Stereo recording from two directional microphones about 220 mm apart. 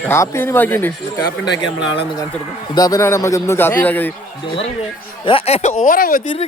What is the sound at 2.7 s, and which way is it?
Speech, 15° left (ahead or behind).